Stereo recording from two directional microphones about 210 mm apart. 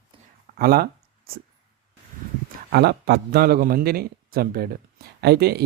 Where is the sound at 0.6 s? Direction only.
45° right (ahead or behind).